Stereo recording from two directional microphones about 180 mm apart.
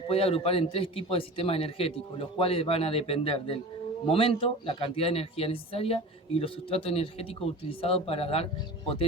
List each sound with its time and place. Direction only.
0.1 s speech: 35° left (ahead or behind)